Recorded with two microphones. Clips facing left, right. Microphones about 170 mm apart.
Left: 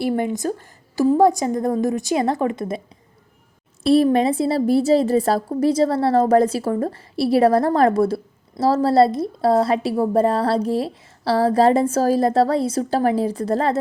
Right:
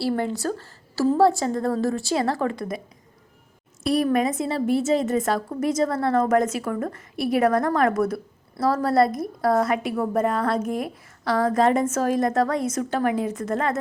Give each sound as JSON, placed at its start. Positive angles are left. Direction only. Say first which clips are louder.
{"t": 0.0, "sound": "a woman's voice", "louder": "left 3 dB", "side_deg": 15}
{"t": 3.8, "sound": "a woman's voice", "louder": "left 6 dB", "side_deg": 30}